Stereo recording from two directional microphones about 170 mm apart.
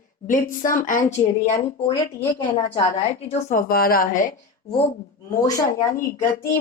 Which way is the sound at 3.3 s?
50° left (ahead or behind).